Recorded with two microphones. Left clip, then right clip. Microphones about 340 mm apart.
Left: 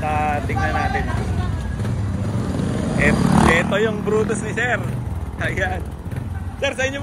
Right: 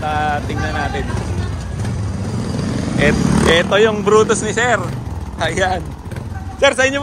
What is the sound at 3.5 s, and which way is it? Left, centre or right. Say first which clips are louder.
Speech: right 6 dB; right.